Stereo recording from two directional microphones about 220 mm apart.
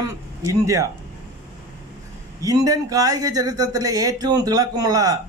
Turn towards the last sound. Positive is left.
turn(degrees=-15)  # may be behind; listen again after turning